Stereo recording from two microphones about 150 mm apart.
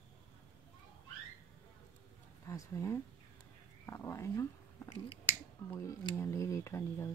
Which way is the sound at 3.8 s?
20° left (ahead or behind).